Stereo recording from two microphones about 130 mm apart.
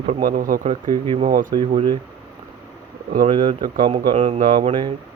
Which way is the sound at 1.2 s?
90° right.